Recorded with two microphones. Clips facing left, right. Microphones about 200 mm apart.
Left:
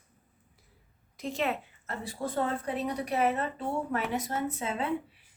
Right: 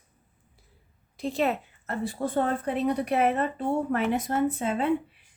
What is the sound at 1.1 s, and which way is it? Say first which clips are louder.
Speech: right 5 dB; 35° right (ahead or behind).